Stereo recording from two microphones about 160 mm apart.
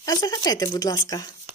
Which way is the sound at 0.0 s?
25° left (ahead or behind).